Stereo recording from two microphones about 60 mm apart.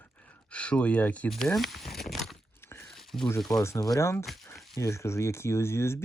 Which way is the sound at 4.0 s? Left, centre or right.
Left.